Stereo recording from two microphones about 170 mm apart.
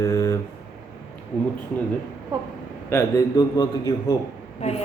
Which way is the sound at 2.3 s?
20° right (ahead or behind).